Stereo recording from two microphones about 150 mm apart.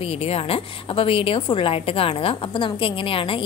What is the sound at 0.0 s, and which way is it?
A woman's voice, 40° left (ahead or behind).